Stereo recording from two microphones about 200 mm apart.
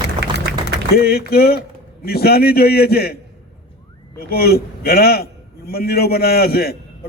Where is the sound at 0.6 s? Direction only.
50° left (ahead or behind).